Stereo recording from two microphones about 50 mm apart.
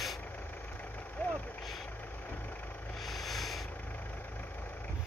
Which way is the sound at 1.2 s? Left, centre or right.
Left.